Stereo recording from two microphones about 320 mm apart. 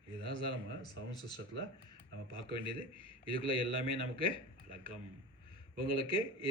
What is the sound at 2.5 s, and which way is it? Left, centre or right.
Speech, centre.